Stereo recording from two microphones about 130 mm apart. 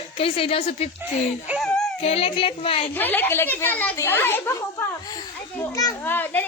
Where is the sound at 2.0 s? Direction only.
50° left (ahead or behind).